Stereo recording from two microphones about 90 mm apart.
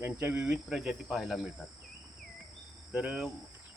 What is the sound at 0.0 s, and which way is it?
Speech, 20° right (ahead or behind).